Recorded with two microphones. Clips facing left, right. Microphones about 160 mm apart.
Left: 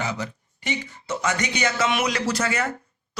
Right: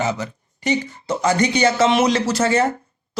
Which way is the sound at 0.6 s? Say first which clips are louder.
Right 9 dB; 40° right (ahead or behind).